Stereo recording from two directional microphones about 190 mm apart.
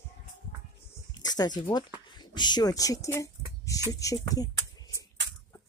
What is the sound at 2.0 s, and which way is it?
Speech, 20° left (ahead or behind).